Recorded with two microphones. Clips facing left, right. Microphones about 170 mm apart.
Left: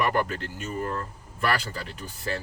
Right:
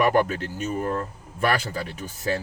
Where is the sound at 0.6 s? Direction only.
40° right (ahead or behind).